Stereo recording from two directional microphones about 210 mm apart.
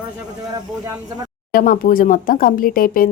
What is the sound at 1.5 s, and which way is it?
Speech, 40° left (ahead or behind).